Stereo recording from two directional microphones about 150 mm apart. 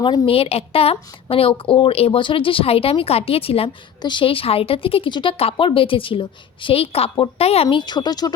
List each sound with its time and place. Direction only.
0.0 s speech: 35° left (ahead or behind)